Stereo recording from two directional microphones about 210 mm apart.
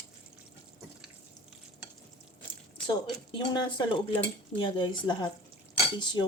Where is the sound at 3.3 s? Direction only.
25° left (ahead or behind).